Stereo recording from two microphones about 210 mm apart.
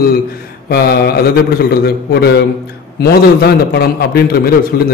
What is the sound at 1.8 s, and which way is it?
A man's voice, 50° left (ahead or behind).